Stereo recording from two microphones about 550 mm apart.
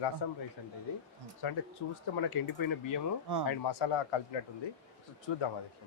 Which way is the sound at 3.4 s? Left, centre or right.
Left.